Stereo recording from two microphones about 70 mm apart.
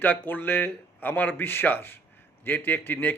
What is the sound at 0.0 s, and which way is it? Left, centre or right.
A man's voice, left.